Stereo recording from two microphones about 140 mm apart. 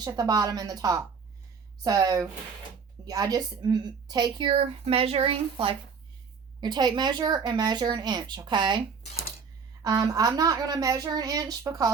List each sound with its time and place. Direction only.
0.0 s a woman's voice: 25° right (ahead or behind); by 5.7 s 40° right (ahead or behind)
6.6 s a woman's voice: 30° right (ahead or behind)
9.8 s speech: 25° right (ahead or behind)